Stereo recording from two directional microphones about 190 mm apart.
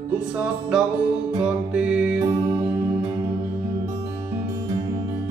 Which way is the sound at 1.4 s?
5° right (ahead or behind).